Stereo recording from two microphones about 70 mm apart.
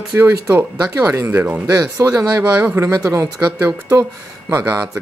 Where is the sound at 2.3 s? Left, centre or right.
Right.